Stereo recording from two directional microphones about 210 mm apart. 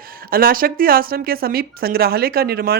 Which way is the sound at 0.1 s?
45° right (ahead or behind).